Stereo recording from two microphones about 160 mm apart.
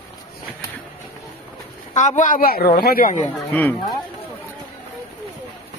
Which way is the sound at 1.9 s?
50° left (ahead or behind).